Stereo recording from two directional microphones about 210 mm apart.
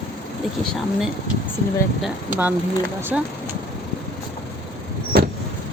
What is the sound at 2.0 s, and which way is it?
Speech, 10° right (ahead or behind).